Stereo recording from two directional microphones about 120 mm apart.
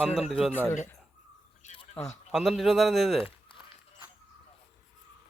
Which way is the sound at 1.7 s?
55° left (ahead or behind).